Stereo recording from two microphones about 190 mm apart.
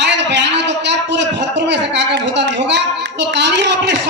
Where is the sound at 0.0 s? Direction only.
65° right (ahead or behind).